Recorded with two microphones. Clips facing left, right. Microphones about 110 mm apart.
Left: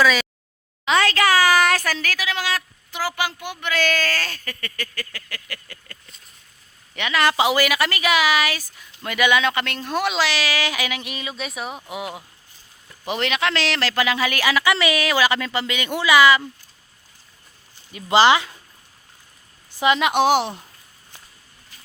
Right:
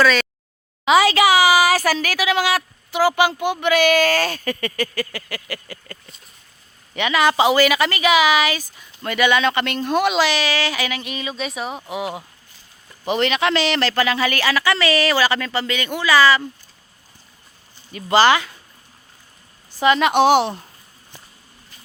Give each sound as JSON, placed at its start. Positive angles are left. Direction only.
{"t": 0.0, "sound": "a sound", "side_deg": 5}
{"t": 0.9, "sound": "a woman's voice", "side_deg": -10}
{"t": 13.9, "sound": "speech", "side_deg": 10}
{"t": 18.1, "sound": "speech", "side_deg": 20}
{"t": 19.8, "sound": "speech", "side_deg": 15}
{"t": 20.1, "sound": "speech", "side_deg": 5}